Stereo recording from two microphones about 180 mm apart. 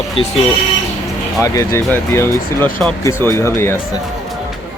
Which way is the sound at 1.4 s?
15° left (ahead or behind).